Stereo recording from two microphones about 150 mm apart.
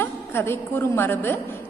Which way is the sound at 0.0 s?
15° left (ahead or behind).